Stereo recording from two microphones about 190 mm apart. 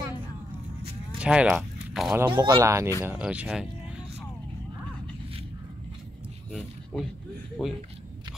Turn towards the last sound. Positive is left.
turn(degrees=0)  # may be behind; listen again after turning